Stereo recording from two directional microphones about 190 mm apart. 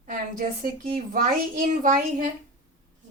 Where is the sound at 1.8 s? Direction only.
45° right (ahead or behind).